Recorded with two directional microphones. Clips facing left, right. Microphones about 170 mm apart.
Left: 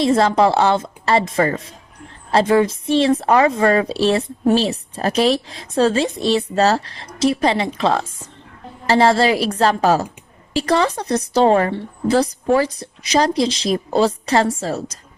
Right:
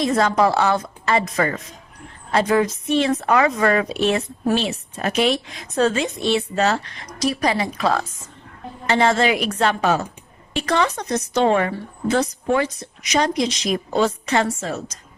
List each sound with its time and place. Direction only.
0.0 s a woman's voice: 30° left (ahead or behind)